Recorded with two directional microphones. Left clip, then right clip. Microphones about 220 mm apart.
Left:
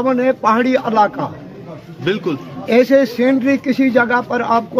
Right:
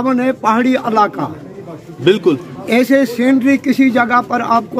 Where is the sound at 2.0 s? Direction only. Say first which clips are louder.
Right 7 dB; 45° right (ahead or behind).